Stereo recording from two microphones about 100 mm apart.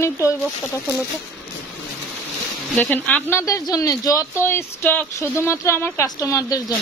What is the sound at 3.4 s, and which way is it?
Speech, 35° left (ahead or behind).